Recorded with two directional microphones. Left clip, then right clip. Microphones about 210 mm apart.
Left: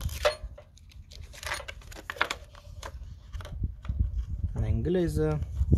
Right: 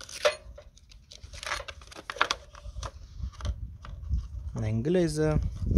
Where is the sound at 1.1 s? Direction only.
15° right (ahead or behind).